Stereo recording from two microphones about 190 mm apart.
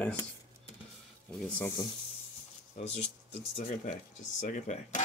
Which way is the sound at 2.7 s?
35° left (ahead or behind).